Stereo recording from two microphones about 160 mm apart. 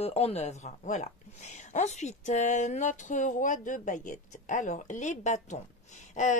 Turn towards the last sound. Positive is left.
turn(degrees=50)  # may be behind; listen again after turning